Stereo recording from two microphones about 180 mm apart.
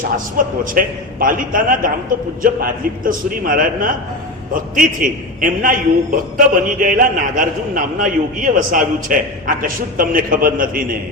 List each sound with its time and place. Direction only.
0.3 s a man's voice: 50° right (ahead or behind)